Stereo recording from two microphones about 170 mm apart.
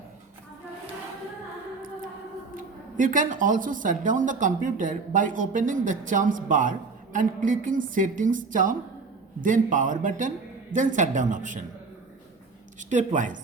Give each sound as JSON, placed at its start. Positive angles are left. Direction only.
{"t": 2.6, "sound": "speech", "side_deg": -50}
{"t": 12.9, "sound": "speech", "side_deg": -45}